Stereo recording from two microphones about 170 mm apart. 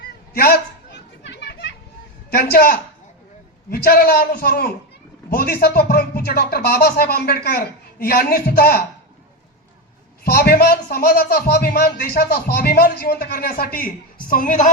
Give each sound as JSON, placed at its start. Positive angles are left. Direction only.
{"t": 0.0, "sound": "children playing", "side_deg": 70}
{"t": 2.3, "sound": "speech", "side_deg": 65}
{"t": 10.2, "sound": "speech", "side_deg": 65}